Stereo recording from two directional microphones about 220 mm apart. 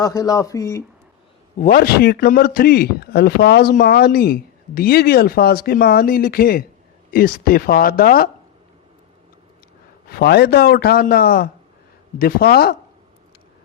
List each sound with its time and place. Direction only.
0.0 s speech: 15° left (ahead or behind)
1.5 s a man's voice: 40° left (ahead or behind)
10.1 s a man's voice: 45° left (ahead or behind)